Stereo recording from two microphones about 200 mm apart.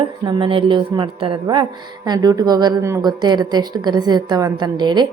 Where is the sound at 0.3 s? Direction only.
25° right (ahead or behind).